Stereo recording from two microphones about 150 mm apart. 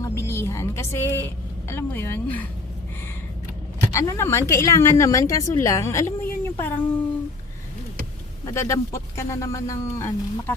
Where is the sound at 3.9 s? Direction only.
20° left (ahead or behind).